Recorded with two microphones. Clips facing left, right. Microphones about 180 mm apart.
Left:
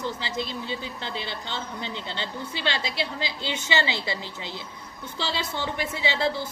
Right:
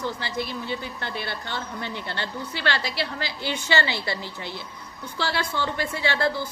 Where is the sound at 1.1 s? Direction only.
55° right (ahead or behind).